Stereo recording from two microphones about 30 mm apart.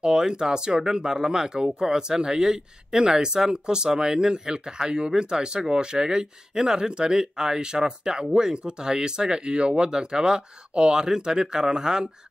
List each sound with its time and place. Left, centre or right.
0.0 s speech: right